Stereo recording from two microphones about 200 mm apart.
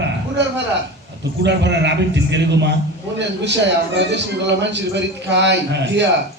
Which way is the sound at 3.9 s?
60° right (ahead or behind).